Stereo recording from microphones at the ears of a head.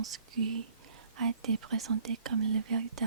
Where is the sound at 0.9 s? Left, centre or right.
Right.